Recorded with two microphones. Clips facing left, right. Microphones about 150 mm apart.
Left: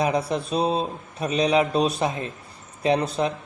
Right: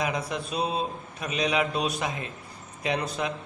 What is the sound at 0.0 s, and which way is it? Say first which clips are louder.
A man's voice: left 6 dB; 35° left (ahead or behind).